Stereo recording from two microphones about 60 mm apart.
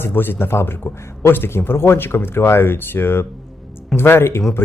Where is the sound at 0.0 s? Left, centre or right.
Left.